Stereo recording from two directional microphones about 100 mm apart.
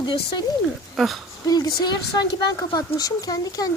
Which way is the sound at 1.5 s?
45° left (ahead or behind).